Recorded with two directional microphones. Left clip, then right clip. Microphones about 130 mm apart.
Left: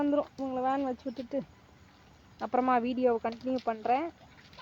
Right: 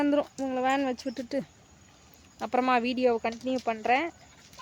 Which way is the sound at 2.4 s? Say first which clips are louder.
Right 2 dB; 30° right (ahead or behind).